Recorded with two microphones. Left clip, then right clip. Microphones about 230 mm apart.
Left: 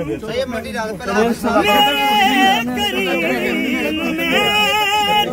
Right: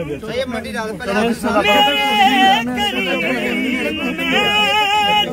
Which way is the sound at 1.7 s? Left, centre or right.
Left.